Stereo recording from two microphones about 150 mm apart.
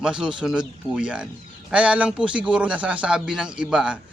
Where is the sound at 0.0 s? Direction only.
5° right (ahead or behind).